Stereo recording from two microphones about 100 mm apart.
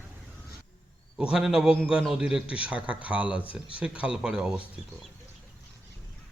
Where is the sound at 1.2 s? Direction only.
10° right (ahead or behind).